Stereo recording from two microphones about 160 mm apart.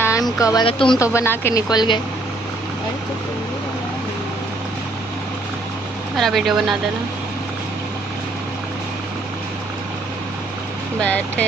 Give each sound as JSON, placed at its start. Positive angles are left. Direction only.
{"t": 0.0, "sound": "a sound", "side_deg": 20}
{"t": 0.7, "sound": "speech", "side_deg": 35}
{"t": 0.9, "sound": "speech", "side_deg": 20}
{"t": 1.7, "sound": "speech", "side_deg": 25}
{"t": 6.1, "sound": "speech", "side_deg": 0}
{"t": 11.0, "sound": "speech", "side_deg": 10}